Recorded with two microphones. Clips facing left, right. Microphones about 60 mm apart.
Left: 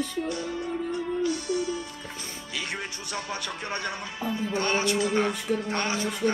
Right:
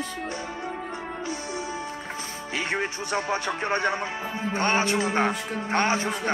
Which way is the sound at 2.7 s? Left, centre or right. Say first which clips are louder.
Right 7 dB; right.